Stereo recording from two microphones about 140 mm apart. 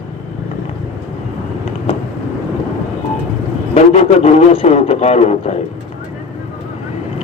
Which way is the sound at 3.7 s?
50° left (ahead or behind).